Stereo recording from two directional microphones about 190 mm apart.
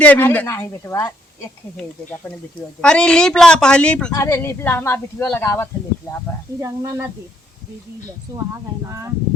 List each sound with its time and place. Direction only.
0.0 s speech: 10° left (ahead or behind)
2.8 s speech: 5° left (ahead or behind)
6.6 s speech: 15° right (ahead or behind)
8.9 s speech: 15° right (ahead or behind)